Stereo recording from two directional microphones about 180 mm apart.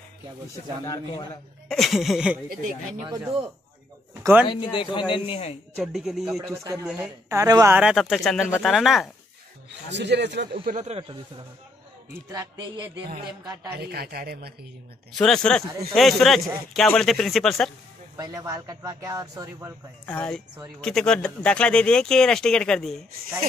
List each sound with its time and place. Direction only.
0.8 s speech: 25° left (ahead or behind)
1.7 s speech: centre (ahead or behind)
4.1 s a sound: 10° right (ahead or behind)
4.5 s speech: 25° left (ahead or behind)
5.8 s speech: centre (ahead or behind)
6.5 s a woman's voice: 15° right (ahead or behind)
7.7 s speech: 5° right (ahead or behind)
9.8 s speech: 75° right (ahead or behind); by 11.1 s 35° right (ahead or behind)
12.1 s speech: 20° right (ahead or behind)
13.7 s speech: 60° right (ahead or behind)
15.1 s speech: 5° left (ahead or behind)
18.1 s speech: 20° right (ahead or behind)
20.1 s speech: 5° left (ahead or behind)